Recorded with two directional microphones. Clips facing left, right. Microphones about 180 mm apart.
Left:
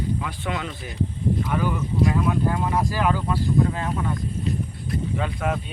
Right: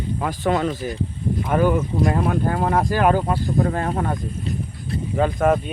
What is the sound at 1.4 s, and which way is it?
Speech, 50° right (ahead or behind).